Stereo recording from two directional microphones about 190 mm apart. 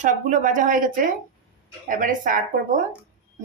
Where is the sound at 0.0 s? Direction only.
40° right (ahead or behind).